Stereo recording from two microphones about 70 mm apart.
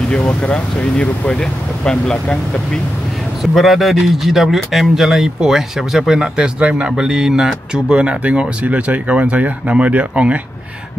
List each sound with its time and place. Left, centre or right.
0.2 s speech: centre
3.5 s a man's voice: centre